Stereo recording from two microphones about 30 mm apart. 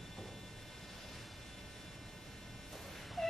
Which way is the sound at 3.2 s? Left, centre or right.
Centre.